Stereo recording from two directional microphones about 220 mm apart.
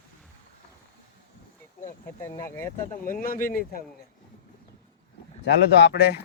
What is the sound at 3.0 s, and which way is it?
Speech, 40° left (ahead or behind).